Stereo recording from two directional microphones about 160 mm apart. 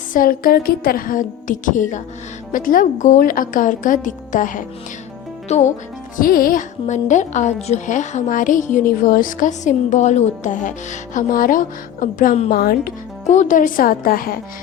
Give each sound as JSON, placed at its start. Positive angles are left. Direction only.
{"t": 0.1, "sound": "speech", "side_deg": 60}
{"t": 6.1, "sound": "a woman's voice", "side_deg": 65}